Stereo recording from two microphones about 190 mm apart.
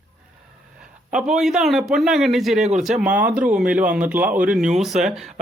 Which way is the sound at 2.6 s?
40° right (ahead or behind).